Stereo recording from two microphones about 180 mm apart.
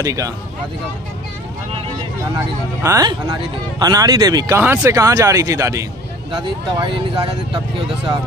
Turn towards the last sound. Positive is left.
turn(degrees=-30)  # may be behind; listen again after turning